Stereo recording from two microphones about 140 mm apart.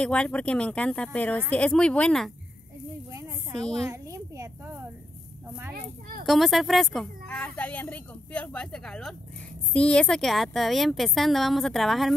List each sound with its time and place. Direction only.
0.0 s speech: 5° left (ahead or behind)
3.8 s a child's voice: 20° right (ahead or behind)
6.2 s speech: centre (ahead or behind)